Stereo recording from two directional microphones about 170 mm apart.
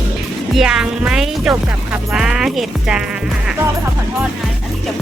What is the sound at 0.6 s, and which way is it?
Speech, 5° right (ahead or behind).